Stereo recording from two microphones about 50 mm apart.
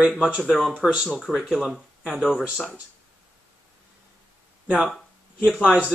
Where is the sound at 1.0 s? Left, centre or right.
Centre.